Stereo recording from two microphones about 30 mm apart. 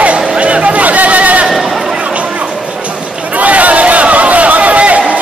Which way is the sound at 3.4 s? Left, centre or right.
Right.